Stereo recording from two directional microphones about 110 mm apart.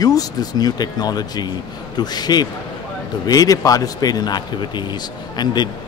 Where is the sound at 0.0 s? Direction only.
35° left (ahead or behind).